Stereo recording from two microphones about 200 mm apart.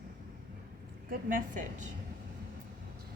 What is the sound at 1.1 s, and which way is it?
Speech, 40° right (ahead or behind).